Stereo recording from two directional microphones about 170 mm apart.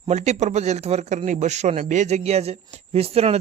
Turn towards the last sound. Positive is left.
turn(degrees=-35)  # may be behind; listen again after turning